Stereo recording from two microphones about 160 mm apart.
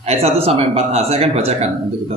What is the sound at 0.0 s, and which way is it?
A woman's voice, 40° right (ahead or behind).